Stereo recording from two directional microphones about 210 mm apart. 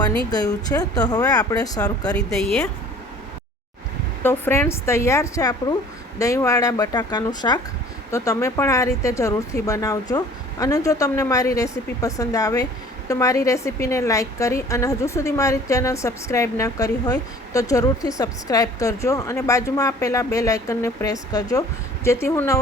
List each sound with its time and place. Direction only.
0.3 s a woman's voice: 20° left (ahead or behind)
2.1 s speech: 5° left (ahead or behind)
4.2 s a woman's voice: 10° left (ahead or behind)